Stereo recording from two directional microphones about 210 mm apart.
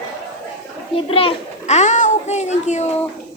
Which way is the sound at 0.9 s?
25° left (ahead or behind).